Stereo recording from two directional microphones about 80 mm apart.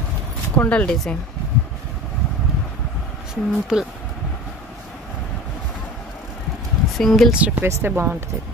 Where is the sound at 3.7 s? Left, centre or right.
Centre.